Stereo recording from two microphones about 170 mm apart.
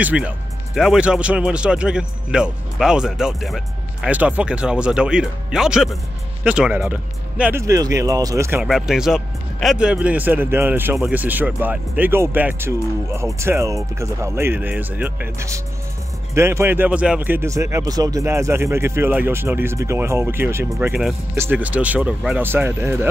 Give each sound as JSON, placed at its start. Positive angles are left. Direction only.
{"t": 0.0, "sound": "a man's voice", "side_deg": -10}
{"t": 7.6, "sound": "speech", "side_deg": -20}
{"t": 8.6, "sound": "speech", "side_deg": -5}